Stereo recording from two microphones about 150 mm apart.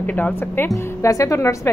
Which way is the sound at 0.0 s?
10° left (ahead or behind).